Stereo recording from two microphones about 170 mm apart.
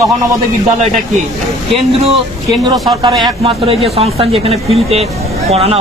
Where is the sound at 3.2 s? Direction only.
30° right (ahead or behind).